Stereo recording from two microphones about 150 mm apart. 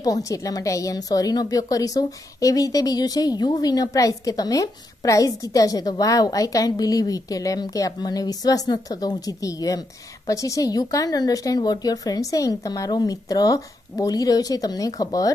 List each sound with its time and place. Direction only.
0.0 s a woman's voice: 25° left (ahead or behind)